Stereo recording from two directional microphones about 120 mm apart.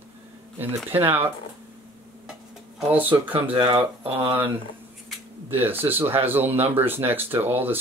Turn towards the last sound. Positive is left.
turn(degrees=-15)  # may be behind; listen again after turning